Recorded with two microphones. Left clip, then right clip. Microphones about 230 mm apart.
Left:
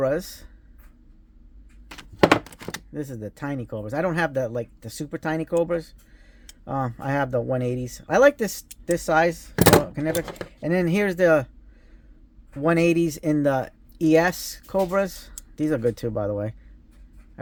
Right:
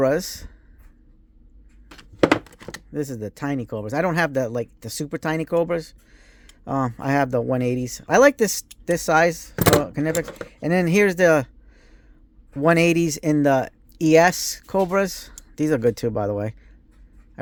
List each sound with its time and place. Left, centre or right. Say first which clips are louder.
0.0 s speech: right 4 dB; right
2.0 s thunk: left 1 dB; centre
2.9 s speech: right 10 dB; right
12.6 s speech: right 3 dB; right